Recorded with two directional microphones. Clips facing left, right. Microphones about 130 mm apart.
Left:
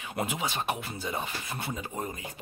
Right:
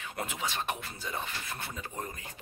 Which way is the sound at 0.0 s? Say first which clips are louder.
Left 4 dB; 15° left (ahead or behind).